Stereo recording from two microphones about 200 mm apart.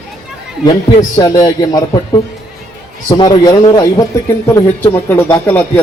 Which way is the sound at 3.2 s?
20° left (ahead or behind).